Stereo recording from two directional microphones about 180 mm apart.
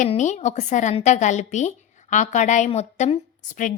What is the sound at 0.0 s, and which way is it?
A woman's voice, 40° left (ahead or behind).